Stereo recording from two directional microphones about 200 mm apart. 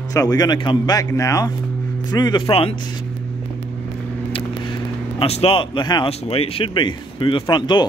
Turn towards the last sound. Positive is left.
turn(degrees=20)  # may be behind; listen again after turning